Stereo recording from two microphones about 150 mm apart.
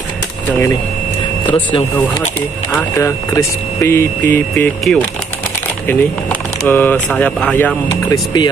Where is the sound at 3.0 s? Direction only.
20° left (ahead or behind).